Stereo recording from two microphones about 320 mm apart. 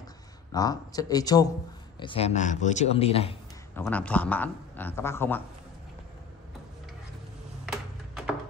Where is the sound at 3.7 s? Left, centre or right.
Centre.